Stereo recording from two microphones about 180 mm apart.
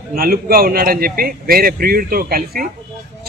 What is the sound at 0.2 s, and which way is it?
A man's voice, 55° right (ahead or behind).